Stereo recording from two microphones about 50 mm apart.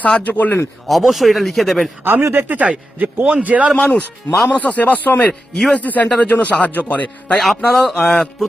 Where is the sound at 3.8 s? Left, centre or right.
Left.